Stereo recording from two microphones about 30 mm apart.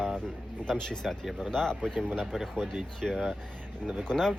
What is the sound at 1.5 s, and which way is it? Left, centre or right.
Speech, centre.